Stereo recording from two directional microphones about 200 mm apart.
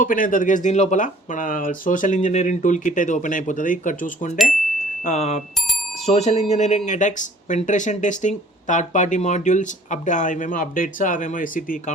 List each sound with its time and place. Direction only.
0.0 s speech: 45° left (ahead or behind)
5.5 s bicycle bell: centre (ahead or behind)
6.1 s speech: 30° left (ahead or behind)